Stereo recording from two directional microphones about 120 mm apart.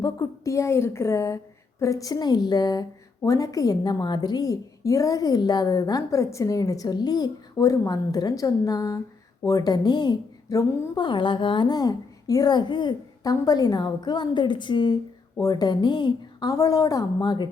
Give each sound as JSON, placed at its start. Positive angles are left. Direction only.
{"t": 0.0, "sound": "a woman's voice", "side_deg": 30}